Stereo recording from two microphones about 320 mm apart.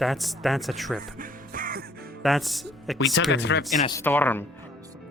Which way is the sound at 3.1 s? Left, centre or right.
Left.